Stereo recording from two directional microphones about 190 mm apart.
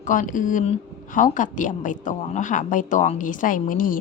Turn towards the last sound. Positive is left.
turn(degrees=45)  # may be behind; listen again after turning